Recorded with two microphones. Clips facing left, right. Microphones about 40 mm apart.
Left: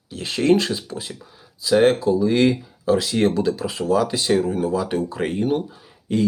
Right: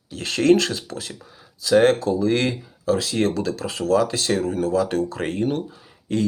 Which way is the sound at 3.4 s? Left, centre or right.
Centre.